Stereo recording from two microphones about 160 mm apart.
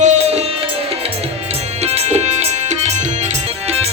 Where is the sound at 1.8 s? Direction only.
40° right (ahead or behind).